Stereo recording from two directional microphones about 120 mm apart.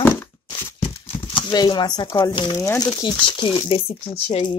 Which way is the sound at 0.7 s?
55° left (ahead or behind).